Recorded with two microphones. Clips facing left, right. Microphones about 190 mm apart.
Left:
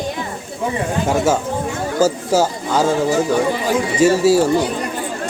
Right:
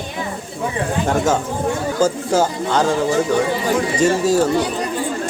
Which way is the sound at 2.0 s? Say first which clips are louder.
Left 1 dB; 10° left (ahead or behind).